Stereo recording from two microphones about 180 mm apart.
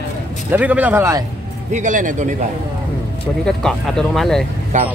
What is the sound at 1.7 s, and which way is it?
Speech, 45° right (ahead or behind).